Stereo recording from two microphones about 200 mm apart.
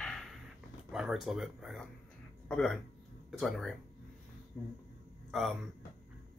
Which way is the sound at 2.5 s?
5° left (ahead or behind).